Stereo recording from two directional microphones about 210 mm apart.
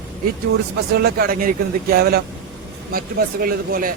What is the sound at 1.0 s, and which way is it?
A man's voice, 45° right (ahead or behind).